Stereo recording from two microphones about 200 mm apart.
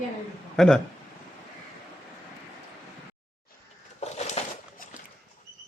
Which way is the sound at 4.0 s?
35° left (ahead or behind).